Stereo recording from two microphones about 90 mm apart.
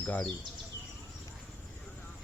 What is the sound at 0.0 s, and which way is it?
Speech, 20° left (ahead or behind).